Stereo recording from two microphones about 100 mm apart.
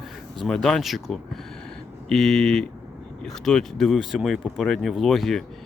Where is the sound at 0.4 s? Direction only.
5° left (ahead or behind).